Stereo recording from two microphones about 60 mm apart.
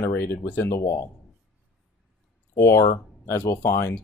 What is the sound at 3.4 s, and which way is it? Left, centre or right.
Speech, left.